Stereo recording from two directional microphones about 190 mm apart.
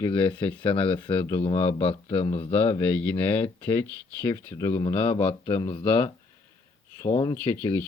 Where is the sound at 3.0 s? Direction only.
10° left (ahead or behind).